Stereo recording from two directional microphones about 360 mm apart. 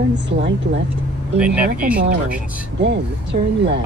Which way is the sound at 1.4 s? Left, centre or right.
Centre.